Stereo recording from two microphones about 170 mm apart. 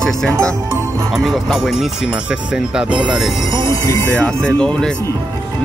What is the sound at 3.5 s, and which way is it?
Music, 30° right (ahead or behind).